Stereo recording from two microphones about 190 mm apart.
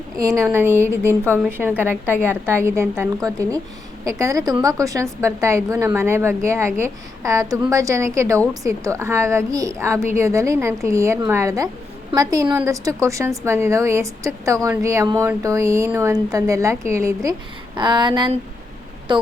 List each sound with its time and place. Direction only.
0.4 s a woman's voice: 10° right (ahead or behind)